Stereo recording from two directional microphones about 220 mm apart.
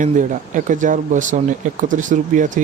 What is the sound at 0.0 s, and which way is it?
Speech, 35° right (ahead or behind).